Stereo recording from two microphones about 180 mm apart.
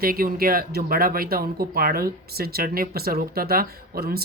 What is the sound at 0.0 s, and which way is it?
Speech, 55° right (ahead or behind).